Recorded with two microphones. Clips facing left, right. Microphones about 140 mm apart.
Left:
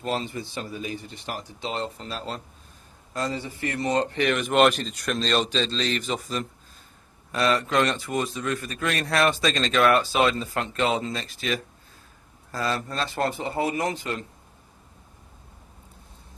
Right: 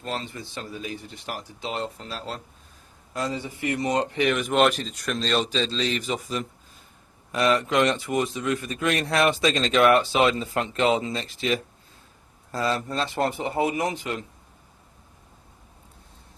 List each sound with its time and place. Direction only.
0.0 s a man's voice: 10° left (ahead or behind); by 14.3 s 10° right (ahead or behind)